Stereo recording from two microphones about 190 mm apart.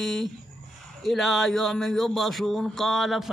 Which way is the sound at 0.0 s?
Centre (ahead or behind).